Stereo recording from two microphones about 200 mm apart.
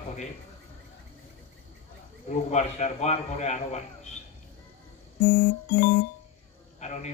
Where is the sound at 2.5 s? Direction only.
35° left (ahead or behind).